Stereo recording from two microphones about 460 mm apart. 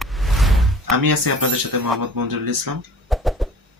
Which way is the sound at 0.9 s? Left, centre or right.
Right.